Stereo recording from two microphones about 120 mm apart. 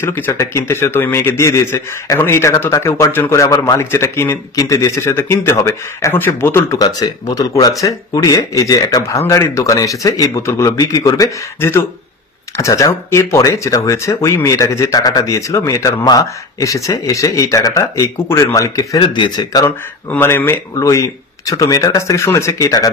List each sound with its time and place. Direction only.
0.0 s a man's voice: 25° left (ahead or behind)
6.8 s a man's voice: 30° left (ahead or behind)
18.9 s speech: 40° left (ahead or behind)
20.1 s a man's voice: 20° left (ahead or behind)